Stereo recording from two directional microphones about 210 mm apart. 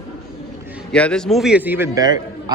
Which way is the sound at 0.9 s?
5° left (ahead or behind).